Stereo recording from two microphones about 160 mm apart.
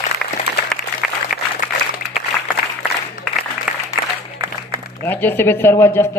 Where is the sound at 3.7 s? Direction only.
5° right (ahead or behind).